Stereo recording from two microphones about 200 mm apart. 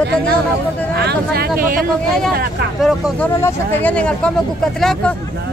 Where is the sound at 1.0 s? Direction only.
50° right (ahead or behind).